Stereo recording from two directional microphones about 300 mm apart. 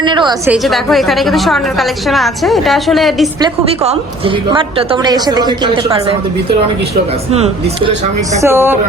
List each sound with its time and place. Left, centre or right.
0.0 s a woman's voice: centre
0.5 s a woman's voice: centre
3.4 s a woman's voice: centre
7.3 s speech: right
8.4 s a woman's voice: centre